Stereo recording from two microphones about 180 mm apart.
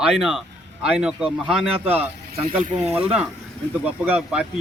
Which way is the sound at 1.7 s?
30° right (ahead or behind).